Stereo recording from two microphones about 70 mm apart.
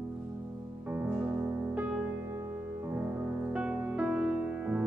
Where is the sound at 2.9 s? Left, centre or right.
Right.